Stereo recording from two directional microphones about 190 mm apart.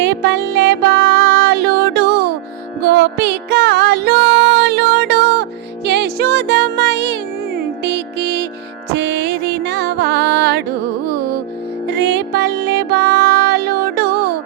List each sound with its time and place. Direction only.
0.0 s music: 70° right (ahead or behind)
11.9 s music: 65° right (ahead or behind)